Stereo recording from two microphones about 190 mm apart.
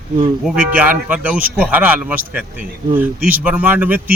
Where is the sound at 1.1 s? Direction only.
5° right (ahead or behind).